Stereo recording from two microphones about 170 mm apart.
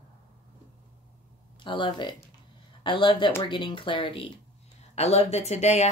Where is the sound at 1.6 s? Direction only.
30° left (ahead or behind).